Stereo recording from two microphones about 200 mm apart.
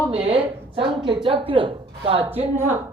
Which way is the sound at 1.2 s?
25° right (ahead or behind).